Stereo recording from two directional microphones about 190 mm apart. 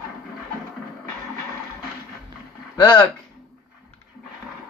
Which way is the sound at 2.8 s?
20° left (ahead or behind).